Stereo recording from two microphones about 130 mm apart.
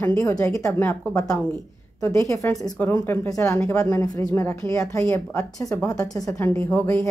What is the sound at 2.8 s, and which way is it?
A woman's voice, 15° left (ahead or behind).